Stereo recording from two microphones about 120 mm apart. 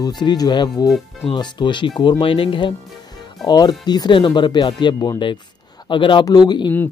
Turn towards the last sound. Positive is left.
turn(degrees=35)  # may be behind; listen again after turning